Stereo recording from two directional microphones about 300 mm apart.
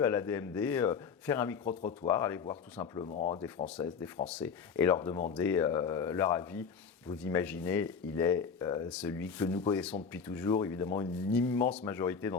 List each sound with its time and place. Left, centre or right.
0.0 s speech: centre
3.8 s speech: centre